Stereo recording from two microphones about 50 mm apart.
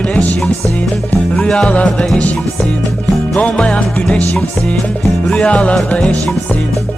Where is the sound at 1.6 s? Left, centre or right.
Left.